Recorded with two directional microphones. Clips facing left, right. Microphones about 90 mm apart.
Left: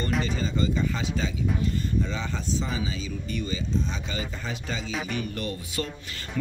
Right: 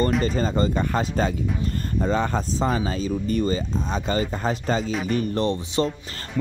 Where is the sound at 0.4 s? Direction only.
45° right (ahead or behind).